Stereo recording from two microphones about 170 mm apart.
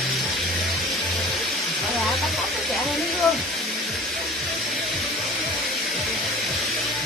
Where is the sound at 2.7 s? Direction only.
Centre (ahead or behind).